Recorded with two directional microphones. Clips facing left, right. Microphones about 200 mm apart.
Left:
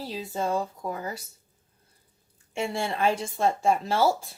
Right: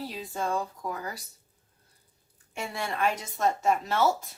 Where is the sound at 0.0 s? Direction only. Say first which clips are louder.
Left 3 dB; 25° left (ahead or behind).